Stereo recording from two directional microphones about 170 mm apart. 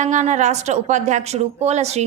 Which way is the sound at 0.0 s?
45° right (ahead or behind).